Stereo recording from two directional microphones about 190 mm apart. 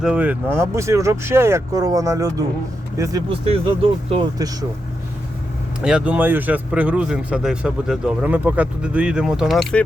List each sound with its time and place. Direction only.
0.0 s speech: 5° right (ahead or behind); by 4.5 s 20° right (ahead or behind)
5.8 s speech: 5° right (ahead or behind)